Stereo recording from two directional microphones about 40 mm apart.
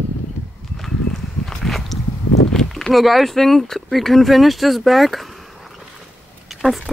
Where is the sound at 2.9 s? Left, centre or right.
Centre.